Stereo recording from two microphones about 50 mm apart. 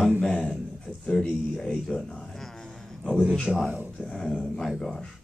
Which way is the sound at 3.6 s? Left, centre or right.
Right.